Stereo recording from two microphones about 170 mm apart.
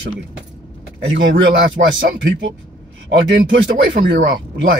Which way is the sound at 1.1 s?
90° right.